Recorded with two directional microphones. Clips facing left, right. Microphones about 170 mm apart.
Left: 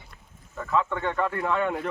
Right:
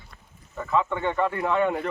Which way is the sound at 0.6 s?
5° right (ahead or behind).